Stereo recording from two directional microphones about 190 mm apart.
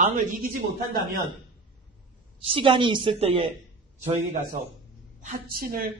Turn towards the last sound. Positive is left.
turn(degrees=-50)  # may be behind; listen again after turning